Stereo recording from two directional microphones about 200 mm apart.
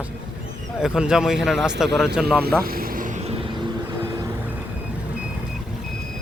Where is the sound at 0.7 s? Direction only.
5° right (ahead or behind).